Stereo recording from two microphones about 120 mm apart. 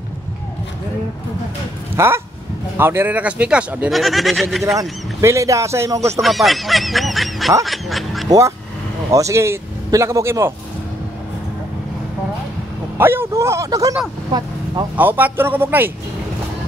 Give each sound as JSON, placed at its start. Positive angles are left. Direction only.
{"t": 2.0, "sound": "a sound", "side_deg": -20}
{"t": 2.8, "sound": "speech", "side_deg": -20}
{"t": 4.7, "sound": "speech", "side_deg": -25}
{"t": 6.2, "sound": "speech", "side_deg": 0}
{"t": 7.6, "sound": "quack", "side_deg": 0}
{"t": 8.3, "sound": "speech", "side_deg": -25}
{"t": 12.9, "sound": "speech", "side_deg": -20}
{"t": 15.0, "sound": "speech", "side_deg": -15}